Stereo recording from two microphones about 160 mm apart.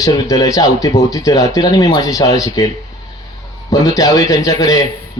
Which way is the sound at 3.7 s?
25° left (ahead or behind).